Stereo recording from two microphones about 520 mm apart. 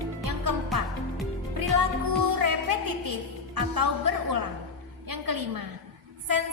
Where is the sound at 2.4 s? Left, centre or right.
Right.